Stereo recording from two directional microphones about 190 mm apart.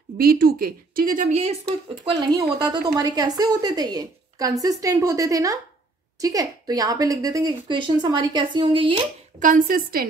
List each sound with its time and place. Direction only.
0.2 s a woman's voice: 50° right (ahead or behind)
2.0 s a woman's voice: 25° right (ahead or behind)
9.4 s a woman's voice: 45° right (ahead or behind)